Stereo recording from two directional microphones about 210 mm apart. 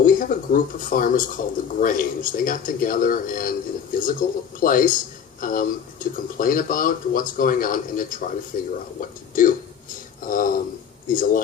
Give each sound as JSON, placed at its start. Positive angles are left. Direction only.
{"t": 0.0, "sound": "speech", "side_deg": 40}